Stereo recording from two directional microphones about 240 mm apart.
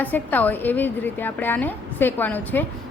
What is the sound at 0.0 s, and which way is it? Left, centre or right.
Speech, centre.